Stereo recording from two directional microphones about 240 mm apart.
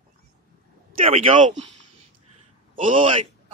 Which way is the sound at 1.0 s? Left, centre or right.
Right.